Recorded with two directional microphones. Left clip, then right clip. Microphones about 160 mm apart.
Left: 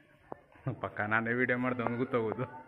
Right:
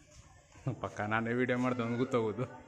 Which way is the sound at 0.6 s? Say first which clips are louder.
Left 2 dB; 15° right (ahead or behind).